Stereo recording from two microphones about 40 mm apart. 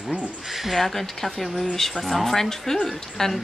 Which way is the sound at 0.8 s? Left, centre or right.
Centre.